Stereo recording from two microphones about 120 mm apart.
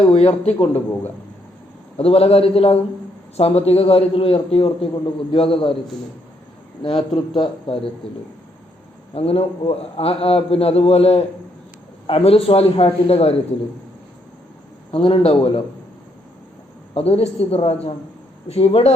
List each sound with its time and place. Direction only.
0.0 s a man's voice: 60° left (ahead or behind)
2.0 s a man's voice: 55° left (ahead or behind)
6.8 s speech: 55° left (ahead or behind)
9.1 s a man's voice: 55° left (ahead or behind)
14.9 s speech: 55° left (ahead or behind)
16.9 s a man's voice: 55° left (ahead or behind)